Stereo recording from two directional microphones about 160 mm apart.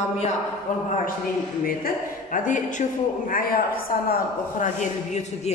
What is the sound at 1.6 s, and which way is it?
A woman's voice, 60° left (ahead or behind).